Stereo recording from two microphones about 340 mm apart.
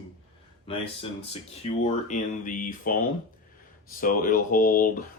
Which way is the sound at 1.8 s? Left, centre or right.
Left.